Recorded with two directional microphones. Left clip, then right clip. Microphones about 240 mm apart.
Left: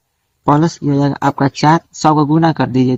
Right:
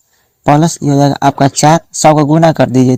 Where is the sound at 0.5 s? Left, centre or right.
Right.